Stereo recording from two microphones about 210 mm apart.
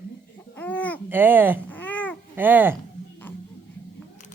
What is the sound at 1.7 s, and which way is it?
Babbling, 10° left (ahead or behind).